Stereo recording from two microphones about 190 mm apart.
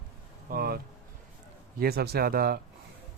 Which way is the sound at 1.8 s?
55° right (ahead or behind).